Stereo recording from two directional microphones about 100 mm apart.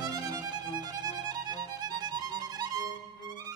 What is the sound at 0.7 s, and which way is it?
Music, 40° right (ahead or behind).